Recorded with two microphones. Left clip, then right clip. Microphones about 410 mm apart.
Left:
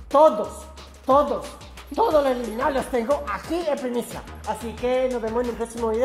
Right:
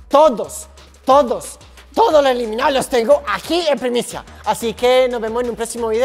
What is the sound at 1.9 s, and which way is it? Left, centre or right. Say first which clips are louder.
A woman's voice: right 7 dB; right.